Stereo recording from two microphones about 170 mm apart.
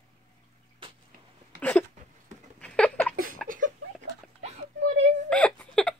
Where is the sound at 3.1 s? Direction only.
55° right (ahead or behind).